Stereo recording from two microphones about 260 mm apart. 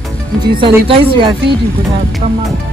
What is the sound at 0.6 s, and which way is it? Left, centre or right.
Speech, centre.